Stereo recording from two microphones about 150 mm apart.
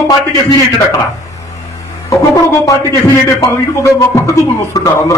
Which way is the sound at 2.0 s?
20° left (ahead or behind).